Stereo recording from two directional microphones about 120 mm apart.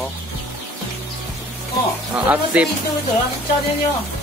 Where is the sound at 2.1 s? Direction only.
10° right (ahead or behind).